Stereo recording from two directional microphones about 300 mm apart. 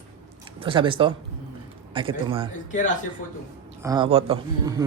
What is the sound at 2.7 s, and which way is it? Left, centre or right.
Speech, left.